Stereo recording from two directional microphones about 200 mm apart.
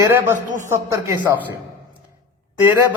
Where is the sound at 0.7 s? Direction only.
15° right (ahead or behind).